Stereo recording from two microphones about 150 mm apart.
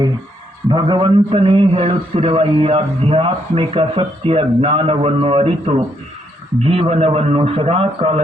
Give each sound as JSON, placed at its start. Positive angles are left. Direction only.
{"t": 0.7, "sound": "a man's voice", "side_deg": -35}